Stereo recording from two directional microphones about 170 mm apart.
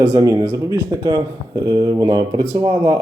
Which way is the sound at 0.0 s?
20° right (ahead or behind).